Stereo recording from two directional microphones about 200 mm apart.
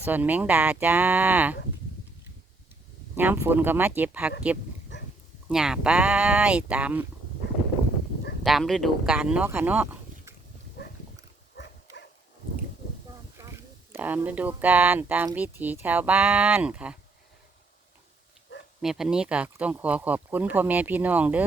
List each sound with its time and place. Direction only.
0.0 s speech: 10° right (ahead or behind)
3.2 s speech: 10° right (ahead or behind)
4.9 s a sound: 60° left (ahead or behind)
5.5 s speech: 5° right (ahead or behind)
8.4 s speech: centre (ahead or behind)
11.5 s dog: 60° left (ahead or behind)
13.4 s speech: 10° right (ahead or behind)
18.8 s speech: centre (ahead or behind)